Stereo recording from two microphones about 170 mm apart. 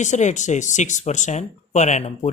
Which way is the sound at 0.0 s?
45° left (ahead or behind).